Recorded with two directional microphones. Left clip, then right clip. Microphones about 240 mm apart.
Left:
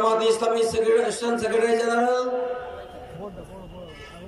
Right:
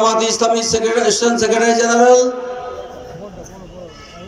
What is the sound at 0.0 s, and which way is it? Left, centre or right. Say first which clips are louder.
A man's voice: right 6 dB; right.